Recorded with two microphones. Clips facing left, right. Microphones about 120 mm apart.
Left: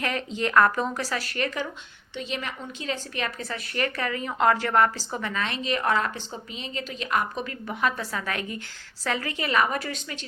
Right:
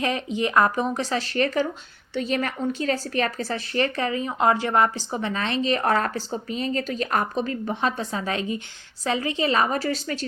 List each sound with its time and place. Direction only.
0.0 s a woman's voice: 20° right (ahead or behind)
5.3 s a woman's voice: 30° right (ahead or behind)